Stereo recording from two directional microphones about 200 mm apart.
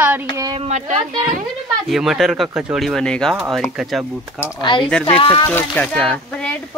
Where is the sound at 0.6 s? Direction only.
35° right (ahead or behind).